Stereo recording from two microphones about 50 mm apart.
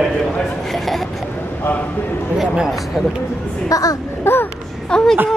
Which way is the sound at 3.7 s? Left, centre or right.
Left.